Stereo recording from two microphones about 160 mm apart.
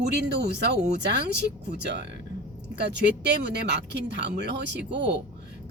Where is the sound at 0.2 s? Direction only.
90° right.